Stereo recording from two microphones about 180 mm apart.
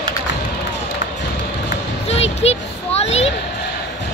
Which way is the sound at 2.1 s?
35° left (ahead or behind).